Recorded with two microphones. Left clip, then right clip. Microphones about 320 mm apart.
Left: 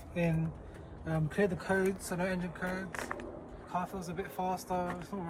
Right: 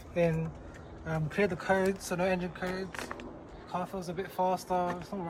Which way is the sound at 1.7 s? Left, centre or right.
Right.